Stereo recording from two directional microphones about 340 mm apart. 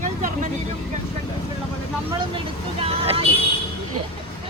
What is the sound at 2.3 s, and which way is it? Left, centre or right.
Vehicle, centre.